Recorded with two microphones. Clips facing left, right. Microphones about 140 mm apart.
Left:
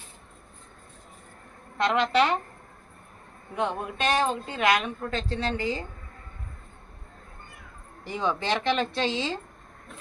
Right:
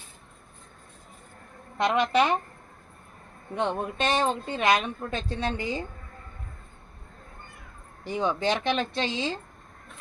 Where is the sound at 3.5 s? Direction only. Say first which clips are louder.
Right 1 dB; 25° right (ahead or behind).